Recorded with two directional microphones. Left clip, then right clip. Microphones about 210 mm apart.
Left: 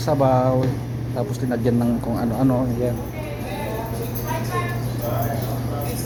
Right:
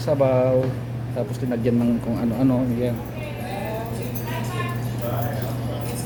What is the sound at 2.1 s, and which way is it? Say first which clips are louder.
Speech: left 2 dB; 20° right (ahead or behind).